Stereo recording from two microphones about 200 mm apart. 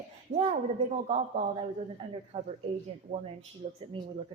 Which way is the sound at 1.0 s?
35° right (ahead or behind).